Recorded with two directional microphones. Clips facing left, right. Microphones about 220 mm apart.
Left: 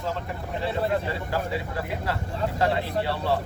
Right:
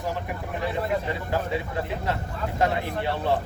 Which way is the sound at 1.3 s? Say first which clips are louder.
Right 3 dB; 20° right (ahead or behind).